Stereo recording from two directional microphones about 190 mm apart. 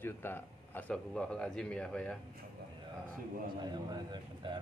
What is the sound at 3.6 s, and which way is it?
Speech, 20° right (ahead or behind).